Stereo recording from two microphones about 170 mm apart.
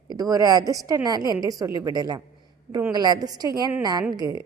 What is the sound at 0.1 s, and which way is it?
A woman's voice, 20° right (ahead or behind).